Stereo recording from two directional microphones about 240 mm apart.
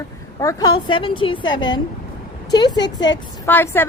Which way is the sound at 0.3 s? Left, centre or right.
Centre.